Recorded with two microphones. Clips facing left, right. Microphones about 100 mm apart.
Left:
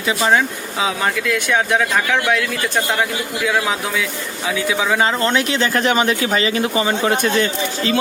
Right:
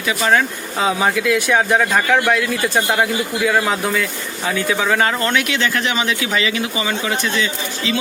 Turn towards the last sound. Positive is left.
turn(degrees=45)  # may be behind; listen again after turning